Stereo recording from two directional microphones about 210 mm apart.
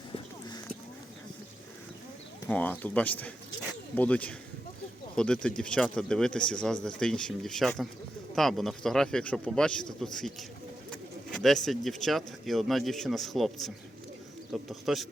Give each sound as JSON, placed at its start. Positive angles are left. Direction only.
{"t": 0.1, "sound": "clip-clop", "side_deg": 20}
{"t": 2.5, "sound": "speech", "side_deg": 5}